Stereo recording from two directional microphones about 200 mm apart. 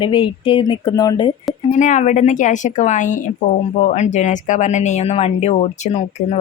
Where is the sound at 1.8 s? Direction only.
40° left (ahead or behind).